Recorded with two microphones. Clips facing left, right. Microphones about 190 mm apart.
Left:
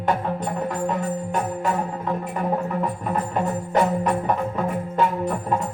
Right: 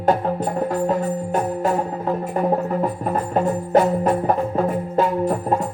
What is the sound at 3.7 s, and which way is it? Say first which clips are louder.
Music: right 4 dB; 40° right (ahead or behind).